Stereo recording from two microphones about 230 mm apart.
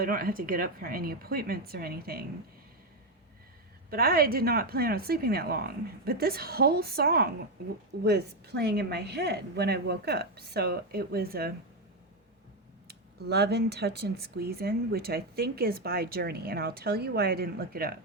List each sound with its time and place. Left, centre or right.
0.0 s a woman's voice: right
3.8 s a woman's voice: right
12.9 s speech: right